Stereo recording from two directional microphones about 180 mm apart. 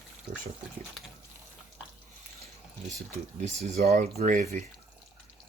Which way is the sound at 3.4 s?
35° right (ahead or behind).